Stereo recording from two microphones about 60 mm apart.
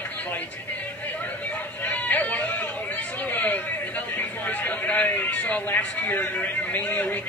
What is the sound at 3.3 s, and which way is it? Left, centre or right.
Chatter, left.